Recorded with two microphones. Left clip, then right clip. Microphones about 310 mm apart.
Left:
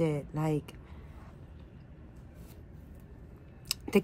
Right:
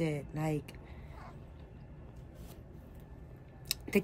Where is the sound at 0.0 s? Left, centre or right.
Centre.